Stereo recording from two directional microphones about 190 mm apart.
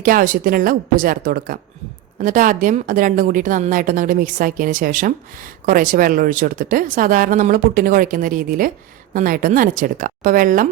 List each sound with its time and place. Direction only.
0.0 s a woman's voice: 45° right (ahead or behind)